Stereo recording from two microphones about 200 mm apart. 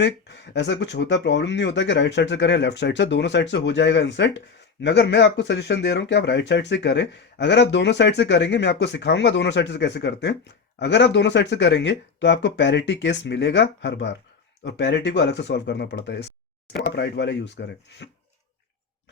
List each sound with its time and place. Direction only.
0.0 s speech: 60° left (ahead or behind)